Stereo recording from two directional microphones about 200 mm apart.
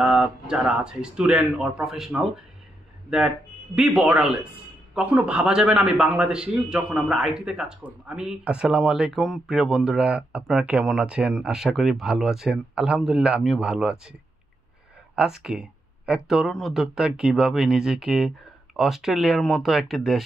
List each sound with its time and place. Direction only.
0.0 s a man's voice: 5° right (ahead or behind)
15.4 s a man's voice: 5° right (ahead or behind)